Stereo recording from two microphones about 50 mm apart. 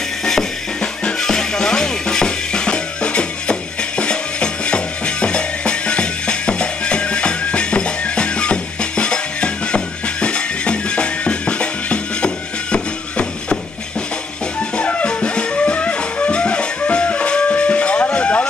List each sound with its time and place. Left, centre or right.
0.2 s drum kit: centre
1.0 s music: centre
14.8 s music: left